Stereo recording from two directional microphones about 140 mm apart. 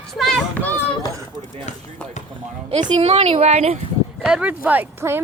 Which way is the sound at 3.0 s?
45° right (ahead or behind).